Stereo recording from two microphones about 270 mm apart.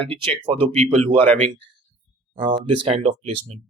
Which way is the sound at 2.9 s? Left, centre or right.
Right.